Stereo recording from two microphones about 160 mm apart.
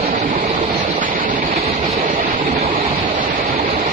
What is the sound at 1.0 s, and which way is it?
Train, 60° right (ahead or behind).